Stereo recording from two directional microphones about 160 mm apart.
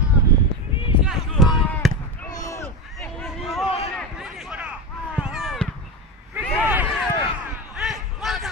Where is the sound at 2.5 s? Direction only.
15° left (ahead or behind).